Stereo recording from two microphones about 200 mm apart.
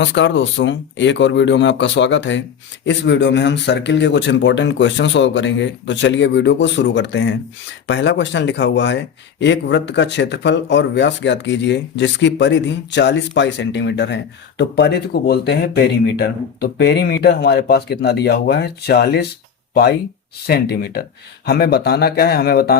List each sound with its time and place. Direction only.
0.0 s speech: 65° left (ahead or behind)